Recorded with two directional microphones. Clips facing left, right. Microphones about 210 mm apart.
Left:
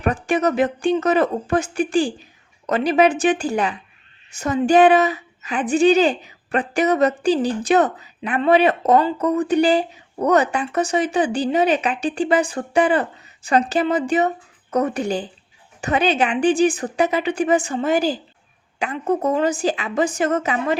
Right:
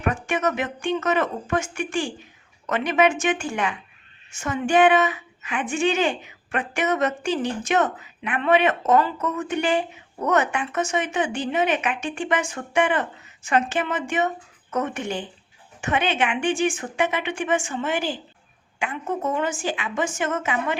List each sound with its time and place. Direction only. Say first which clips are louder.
0.0 s a woman's voice: left 5 dB; 35° left (ahead or behind)